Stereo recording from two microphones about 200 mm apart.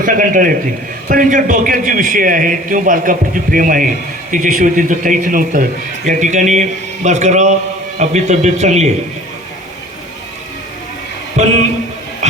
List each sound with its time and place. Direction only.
0.0 s a man's voice: 40° right (ahead or behind)
11.4 s a man's voice: 35° right (ahead or behind)
12.2 s a sound: 35° right (ahead or behind)